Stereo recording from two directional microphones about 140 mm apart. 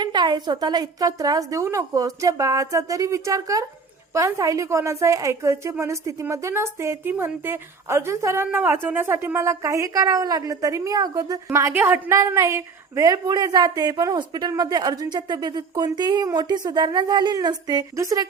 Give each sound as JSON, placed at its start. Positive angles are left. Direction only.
{"t": 0.0, "sound": "a woman's voice", "side_deg": -30}